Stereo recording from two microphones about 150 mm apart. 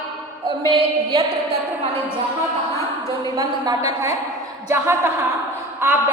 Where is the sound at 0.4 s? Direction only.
35° right (ahead or behind).